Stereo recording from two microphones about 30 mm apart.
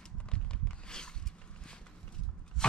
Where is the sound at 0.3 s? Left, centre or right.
Left.